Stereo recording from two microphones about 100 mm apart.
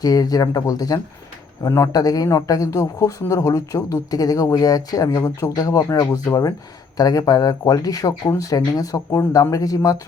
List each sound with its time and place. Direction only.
0.0 s a man's voice: 40° left (ahead or behind)